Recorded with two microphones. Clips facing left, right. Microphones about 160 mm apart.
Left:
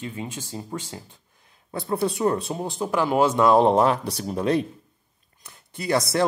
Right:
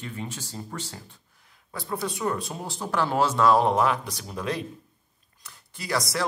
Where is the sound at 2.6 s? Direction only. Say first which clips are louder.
Left 3 dB; 15° left (ahead or behind).